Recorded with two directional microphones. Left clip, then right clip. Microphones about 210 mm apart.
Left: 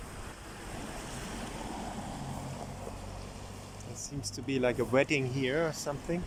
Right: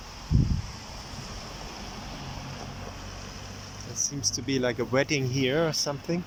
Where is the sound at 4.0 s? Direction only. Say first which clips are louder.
Right 13 dB; 25° left (ahead or behind).